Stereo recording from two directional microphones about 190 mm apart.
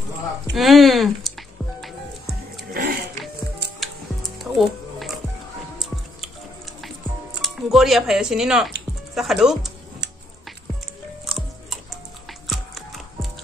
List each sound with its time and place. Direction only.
0.6 s speech: centre (ahead or behind)
2.7 s music: 50° right (ahead or behind)
3.8 s music: centre (ahead or behind)
7.4 s speech: centre (ahead or behind)
11.2 s music: centre (ahead or behind)